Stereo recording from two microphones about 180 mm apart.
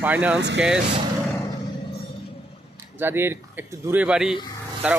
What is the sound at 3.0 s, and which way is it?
Speech, 10° right (ahead or behind).